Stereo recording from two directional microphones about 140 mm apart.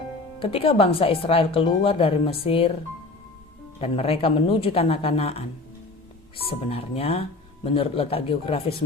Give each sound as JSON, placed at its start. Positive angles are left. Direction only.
{"t": 0.3, "sound": "speech", "side_deg": 40}
{"t": 3.8, "sound": "speech", "side_deg": 45}